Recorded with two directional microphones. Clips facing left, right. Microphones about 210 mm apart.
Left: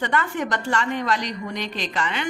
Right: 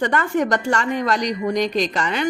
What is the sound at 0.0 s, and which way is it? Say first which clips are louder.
A woman's voice: right 5 dB; 45° right (ahead or behind).